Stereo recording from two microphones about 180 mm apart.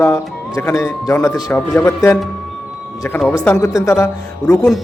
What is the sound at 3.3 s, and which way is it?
Speech, 15° left (ahead or behind).